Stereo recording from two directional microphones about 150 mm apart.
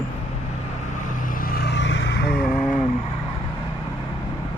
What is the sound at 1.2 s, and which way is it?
Vehicle, 70° left (ahead or behind).